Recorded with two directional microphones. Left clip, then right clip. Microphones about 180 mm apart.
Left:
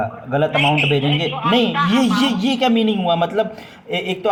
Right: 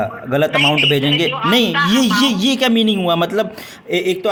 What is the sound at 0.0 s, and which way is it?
A man's voice, 45° right (ahead or behind).